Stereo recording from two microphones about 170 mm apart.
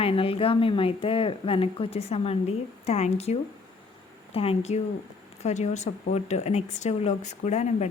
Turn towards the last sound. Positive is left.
turn(degrees=45)  # may be behind; listen again after turning